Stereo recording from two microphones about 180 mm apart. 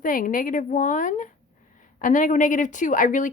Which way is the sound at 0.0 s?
50° left (ahead or behind).